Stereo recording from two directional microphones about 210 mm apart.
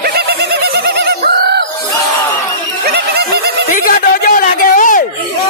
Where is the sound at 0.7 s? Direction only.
50° right (ahead or behind).